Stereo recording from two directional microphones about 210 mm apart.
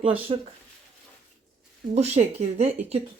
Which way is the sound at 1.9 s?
30° right (ahead or behind).